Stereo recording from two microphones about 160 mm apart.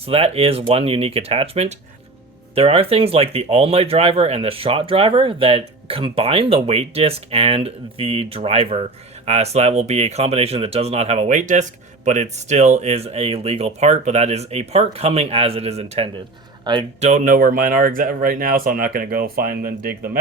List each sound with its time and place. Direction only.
0.0 s speech: 35° right (ahead or behind)
16.7 s speech: 30° right (ahead or behind)
17.0 s speech: 50° right (ahead or behind)